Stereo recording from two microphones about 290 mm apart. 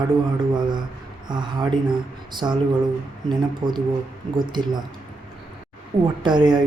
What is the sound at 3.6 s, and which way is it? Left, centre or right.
Speech, centre.